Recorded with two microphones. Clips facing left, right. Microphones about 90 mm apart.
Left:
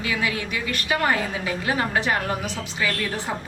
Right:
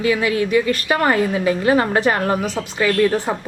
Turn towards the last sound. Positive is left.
turn(degrees=-45)  # may be behind; listen again after turning